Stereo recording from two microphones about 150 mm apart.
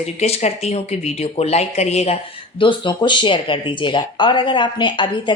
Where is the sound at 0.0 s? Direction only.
45° left (ahead or behind).